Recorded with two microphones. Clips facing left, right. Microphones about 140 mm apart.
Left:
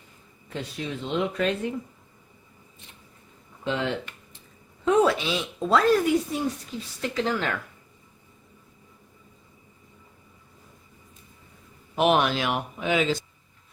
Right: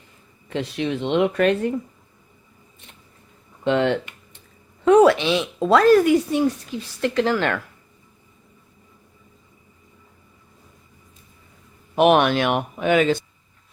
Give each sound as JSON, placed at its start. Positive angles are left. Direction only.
{"t": 0.5, "sound": "speech", "side_deg": -85}
{"t": 3.6, "sound": "speech", "side_deg": -65}
{"t": 11.9, "sound": "speech", "side_deg": -60}